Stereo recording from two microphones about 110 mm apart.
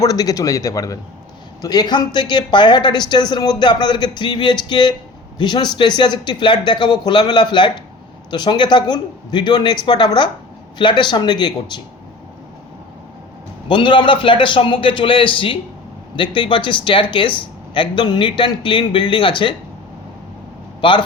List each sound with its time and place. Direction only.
0.0 s speech: 35° left (ahead or behind)
13.7 s speech: 45° left (ahead or behind)
20.8 s speech: 45° left (ahead or behind)